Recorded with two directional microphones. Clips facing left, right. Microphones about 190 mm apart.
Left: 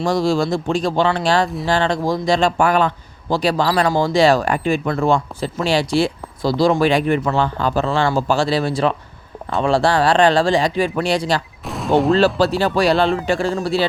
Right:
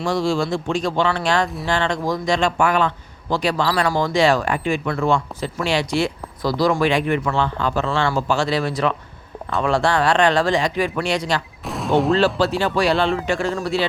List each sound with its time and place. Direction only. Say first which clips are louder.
0.0 s a man's voice: left 3 dB; 40° left (ahead or behind)
11.6 s fusillade: left 2 dB; centre (ahead or behind)
12.1 s a man's voice: left 3 dB; 40° left (ahead or behind)